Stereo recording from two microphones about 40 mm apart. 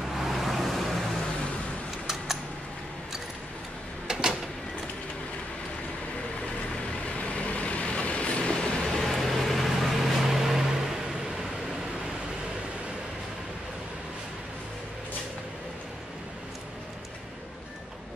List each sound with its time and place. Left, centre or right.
0.2 s vehicle: centre
4.1 s a sound: centre
7.3 s vehicle: left
9.0 s vehicle: centre